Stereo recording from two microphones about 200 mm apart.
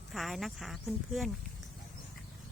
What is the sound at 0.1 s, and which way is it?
Speech, centre (ahead or behind).